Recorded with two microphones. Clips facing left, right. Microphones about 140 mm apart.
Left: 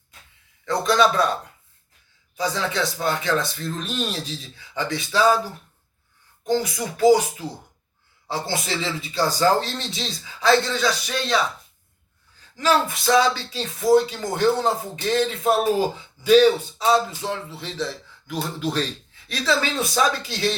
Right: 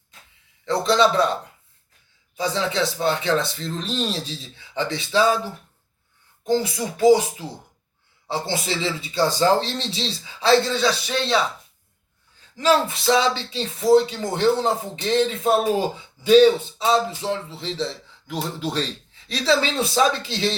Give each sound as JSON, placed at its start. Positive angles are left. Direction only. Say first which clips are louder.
{"t": 0.6, "sound": "a man's voice", "louder": "right 1 dB", "side_deg": -25}
{"t": 2.4, "sound": "a man's voice", "louder": "right 1 dB", "side_deg": -25}
{"t": 6.5, "sound": "a man's voice", "louder": "right 1 dB", "side_deg": -25}
{"t": 12.5, "sound": "a man's voice", "louder": "right 2 dB", "side_deg": -25}